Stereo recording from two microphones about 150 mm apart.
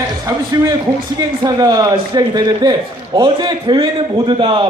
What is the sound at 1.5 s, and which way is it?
A man's voice, 25° right (ahead or behind).